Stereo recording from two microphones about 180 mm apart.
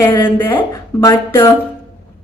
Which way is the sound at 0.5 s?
20° left (ahead or behind).